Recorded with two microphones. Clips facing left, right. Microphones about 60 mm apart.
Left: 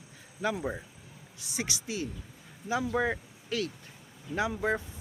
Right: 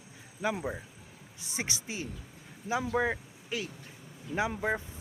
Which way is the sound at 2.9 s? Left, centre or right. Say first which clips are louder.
Even; centre.